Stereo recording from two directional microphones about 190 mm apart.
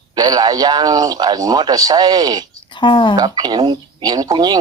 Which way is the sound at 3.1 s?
20° right (ahead or behind).